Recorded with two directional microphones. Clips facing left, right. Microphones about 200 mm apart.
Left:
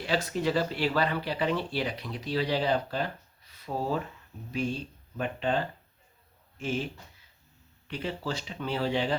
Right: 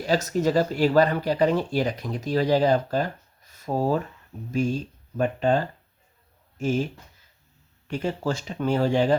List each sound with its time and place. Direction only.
0.0 s speech: 40° right (ahead or behind)
7.9 s speech: 45° right (ahead or behind)